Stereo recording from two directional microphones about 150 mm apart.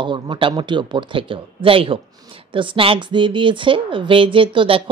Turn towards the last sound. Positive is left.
turn(degrees=-35)  # may be behind; listen again after turning